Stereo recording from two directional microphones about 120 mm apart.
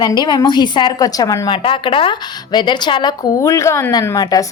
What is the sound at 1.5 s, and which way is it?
A woman's voice, 45° left (ahead or behind).